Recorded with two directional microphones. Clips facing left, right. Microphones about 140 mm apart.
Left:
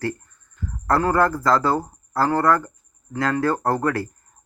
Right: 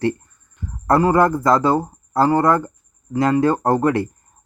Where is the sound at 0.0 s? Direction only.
20° right (ahead or behind).